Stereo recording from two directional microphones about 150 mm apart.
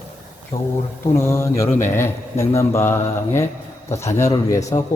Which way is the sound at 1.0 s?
20° left (ahead or behind).